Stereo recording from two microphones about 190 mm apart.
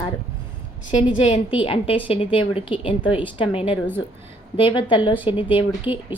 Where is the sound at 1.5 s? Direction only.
30° left (ahead or behind).